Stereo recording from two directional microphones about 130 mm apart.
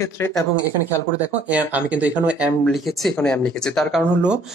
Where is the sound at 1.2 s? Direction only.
10° right (ahead or behind); by 4.0 s 5° left (ahead or behind).